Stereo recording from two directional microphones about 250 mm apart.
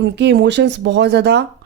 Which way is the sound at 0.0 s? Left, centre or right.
Right.